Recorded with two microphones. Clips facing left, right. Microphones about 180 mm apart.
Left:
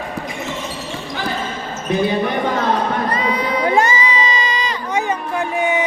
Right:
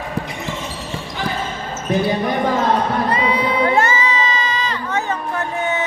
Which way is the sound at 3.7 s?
15° left (ahead or behind).